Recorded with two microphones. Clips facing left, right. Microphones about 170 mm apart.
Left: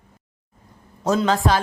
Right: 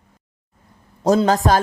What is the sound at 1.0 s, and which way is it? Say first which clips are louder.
Speech: right 4 dB; 40° right (ahead or behind).